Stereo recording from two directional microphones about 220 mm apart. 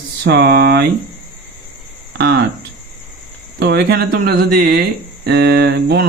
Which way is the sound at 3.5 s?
50° right (ahead or behind).